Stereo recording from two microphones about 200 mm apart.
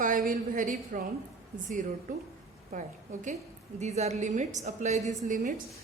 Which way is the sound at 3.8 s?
35° right (ahead or behind).